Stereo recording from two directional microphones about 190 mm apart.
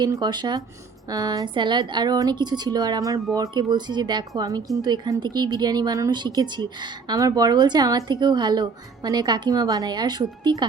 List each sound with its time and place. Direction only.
0.0 s speech: 20° right (ahead or behind)